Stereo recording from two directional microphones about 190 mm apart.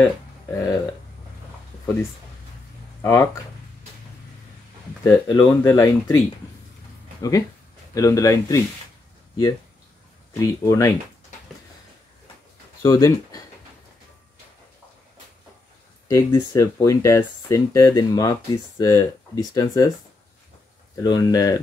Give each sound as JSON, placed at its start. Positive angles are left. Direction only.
{"t": 0.0, "sound": "speech", "side_deg": 15}
{"t": 3.0, "sound": "speech", "side_deg": 15}
{"t": 5.0, "sound": "speech", "side_deg": 15}
{"t": 10.4, "sound": "speech", "side_deg": 15}
{"t": 12.8, "sound": "speech", "side_deg": 20}
{"t": 16.1, "sound": "speech", "side_deg": 15}
{"t": 20.9, "sound": "speech", "side_deg": 20}